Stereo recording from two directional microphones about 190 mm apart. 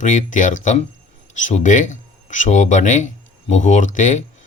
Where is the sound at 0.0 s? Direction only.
40° left (ahead or behind).